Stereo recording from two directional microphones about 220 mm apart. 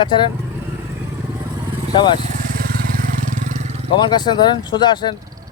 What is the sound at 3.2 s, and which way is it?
Vehicle, 35° right (ahead or behind).